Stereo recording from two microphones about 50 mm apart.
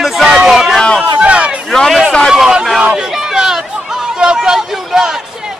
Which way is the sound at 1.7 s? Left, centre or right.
Centre.